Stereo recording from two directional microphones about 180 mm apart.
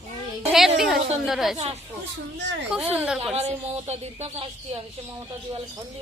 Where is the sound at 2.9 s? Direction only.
5° right (ahead or behind).